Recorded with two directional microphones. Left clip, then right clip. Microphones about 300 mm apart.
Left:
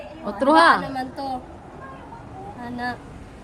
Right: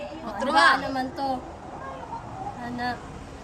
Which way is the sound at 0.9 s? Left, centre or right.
Centre.